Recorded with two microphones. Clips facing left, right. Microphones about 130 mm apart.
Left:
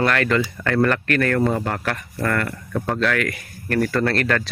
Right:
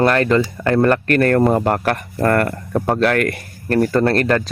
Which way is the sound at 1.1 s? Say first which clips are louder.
Right 5 dB; 45° right (ahead or behind).